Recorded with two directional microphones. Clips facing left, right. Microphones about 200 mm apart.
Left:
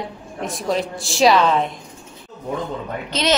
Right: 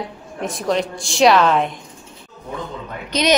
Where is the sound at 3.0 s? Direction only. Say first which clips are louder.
Right 3 dB; 15° right (ahead or behind).